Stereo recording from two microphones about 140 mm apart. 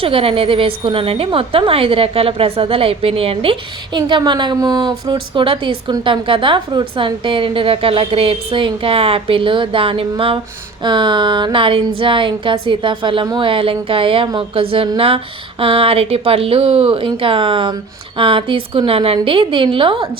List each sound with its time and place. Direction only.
0.0 s a woman's voice: 40° right (ahead or behind)